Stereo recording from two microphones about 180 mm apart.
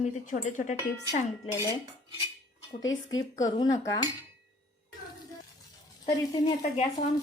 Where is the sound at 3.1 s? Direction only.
20° left (ahead or behind).